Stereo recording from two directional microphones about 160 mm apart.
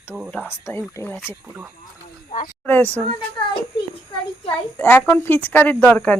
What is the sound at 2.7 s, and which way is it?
Speech, 10° left (ahead or behind).